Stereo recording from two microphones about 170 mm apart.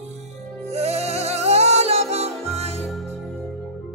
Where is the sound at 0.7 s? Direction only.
40° right (ahead or behind).